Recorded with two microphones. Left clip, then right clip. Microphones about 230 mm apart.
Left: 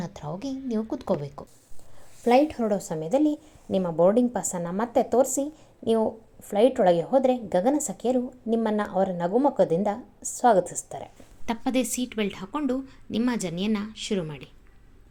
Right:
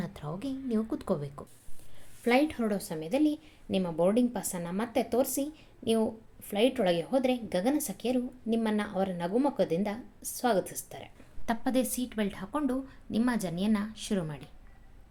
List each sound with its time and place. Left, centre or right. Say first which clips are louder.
0.0 s a woman's voice: left 4 dB; centre